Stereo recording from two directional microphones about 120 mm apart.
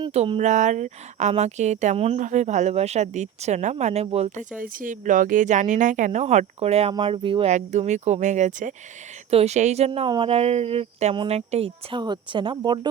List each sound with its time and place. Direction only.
0.3 s speech: 90° right; by 4.4 s 60° right (ahead or behind)
4.9 s speech: 90° right; by 6.9 s 60° right (ahead or behind)
6.9 s speech: 45° right (ahead or behind)
7.5 s speech: 75° right (ahead or behind)
9.3 s speech: 60° right (ahead or behind)
10.1 s speech: 50° right (ahead or behind)
11.3 s a woman's voice: 60° right (ahead or behind); by 12.9 s 40° right (ahead or behind)